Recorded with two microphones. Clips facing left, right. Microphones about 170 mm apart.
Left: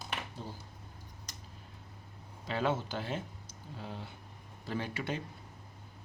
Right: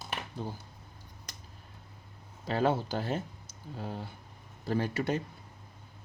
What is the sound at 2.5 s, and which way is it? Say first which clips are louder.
Speech: right 4 dB; 40° right (ahead or behind).